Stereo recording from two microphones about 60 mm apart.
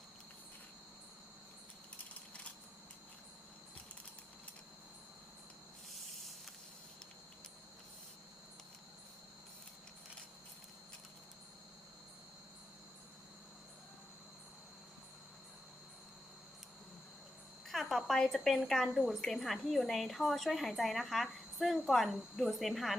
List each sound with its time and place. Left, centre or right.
17.7 s a woman's voice: centre